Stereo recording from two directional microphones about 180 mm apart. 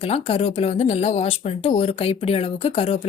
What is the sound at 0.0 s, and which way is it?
Speech, 35° left (ahead or behind).